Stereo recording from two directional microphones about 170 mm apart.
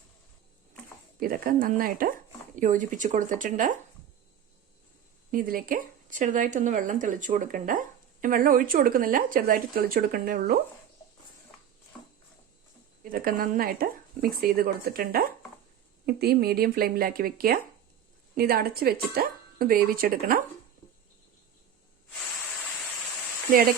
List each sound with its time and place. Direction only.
1.2 s speech: 55° right (ahead or behind)
5.3 s speech: 55° right (ahead or behind)
13.1 s speech: 60° right (ahead or behind)